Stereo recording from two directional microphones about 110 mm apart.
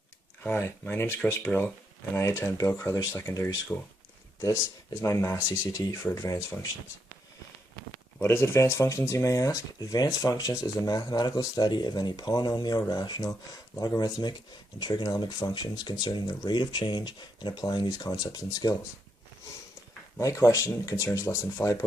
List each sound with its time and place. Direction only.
0.4 s speech: 20° left (ahead or behind)
8.2 s speech: 25° left (ahead or behind)
20.1 s speech: 30° left (ahead or behind)